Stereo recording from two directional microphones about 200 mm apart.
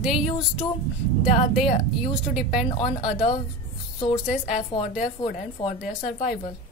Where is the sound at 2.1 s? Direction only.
5° right (ahead or behind).